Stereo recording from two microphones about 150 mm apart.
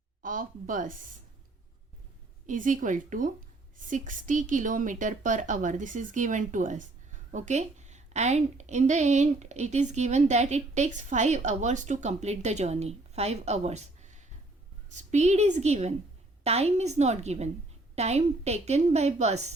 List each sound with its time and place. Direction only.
0.2 s speech: 65° right (ahead or behind)
2.5 s a woman's voice: 60° right (ahead or behind)